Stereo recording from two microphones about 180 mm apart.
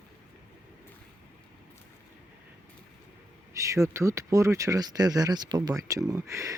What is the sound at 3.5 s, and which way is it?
Speech, 15° right (ahead or behind).